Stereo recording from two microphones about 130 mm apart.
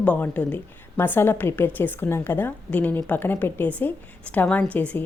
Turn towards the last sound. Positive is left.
turn(degrees=10)  # may be behind; listen again after turning